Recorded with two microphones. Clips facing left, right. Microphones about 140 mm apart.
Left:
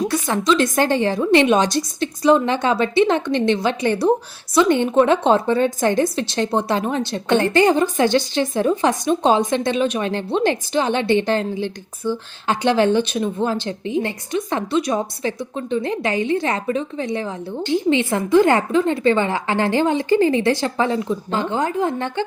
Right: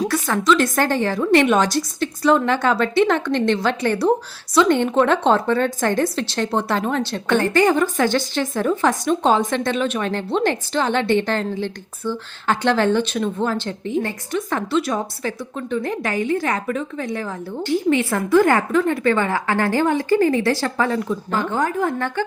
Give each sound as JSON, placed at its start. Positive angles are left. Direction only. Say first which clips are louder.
{"t": 0.1, "sound": "a woman's voice", "louder": "even", "side_deg": 20}